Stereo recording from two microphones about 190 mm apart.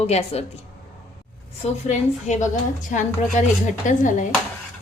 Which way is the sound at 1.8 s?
40° left (ahead or behind).